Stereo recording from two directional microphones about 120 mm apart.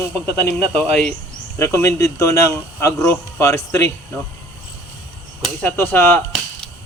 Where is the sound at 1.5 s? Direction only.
20° left (ahead or behind).